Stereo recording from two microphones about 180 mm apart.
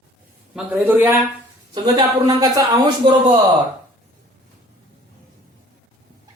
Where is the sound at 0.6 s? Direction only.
10° right (ahead or behind).